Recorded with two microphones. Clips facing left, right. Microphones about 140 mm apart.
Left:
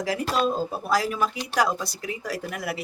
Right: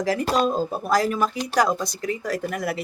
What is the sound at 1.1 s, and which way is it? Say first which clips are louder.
Speech: right 3 dB; 40° right (ahead or behind).